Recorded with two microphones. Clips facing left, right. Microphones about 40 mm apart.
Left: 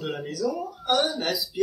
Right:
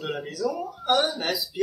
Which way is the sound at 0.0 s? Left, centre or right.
Centre.